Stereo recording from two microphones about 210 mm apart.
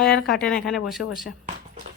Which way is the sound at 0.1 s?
45° left (ahead or behind).